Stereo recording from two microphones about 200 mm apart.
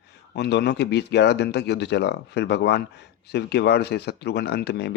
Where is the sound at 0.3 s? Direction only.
55° left (ahead or behind).